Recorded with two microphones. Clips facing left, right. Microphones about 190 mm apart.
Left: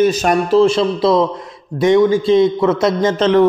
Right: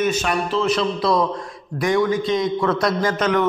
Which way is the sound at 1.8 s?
25° left (ahead or behind).